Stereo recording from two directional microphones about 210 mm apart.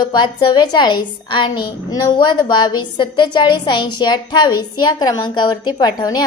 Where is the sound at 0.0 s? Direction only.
20° left (ahead or behind).